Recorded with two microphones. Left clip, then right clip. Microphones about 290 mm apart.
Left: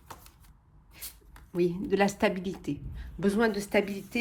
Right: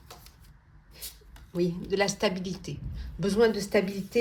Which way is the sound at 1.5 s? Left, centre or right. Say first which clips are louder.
Left 1 dB; left.